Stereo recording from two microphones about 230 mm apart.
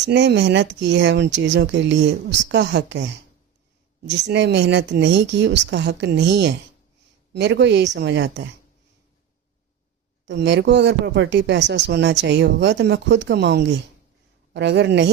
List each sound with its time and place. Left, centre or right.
0.0 s speech: right
10.2 s speech: right